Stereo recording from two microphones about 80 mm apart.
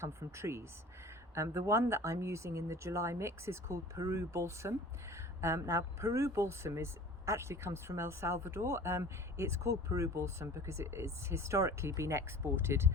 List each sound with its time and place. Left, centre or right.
0.0 s speech: right